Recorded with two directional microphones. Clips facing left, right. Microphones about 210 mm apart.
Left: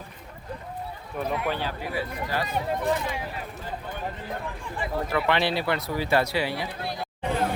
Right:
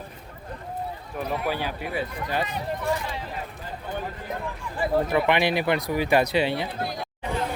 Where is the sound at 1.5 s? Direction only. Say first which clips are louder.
Right 1 dB; 15° right (ahead or behind).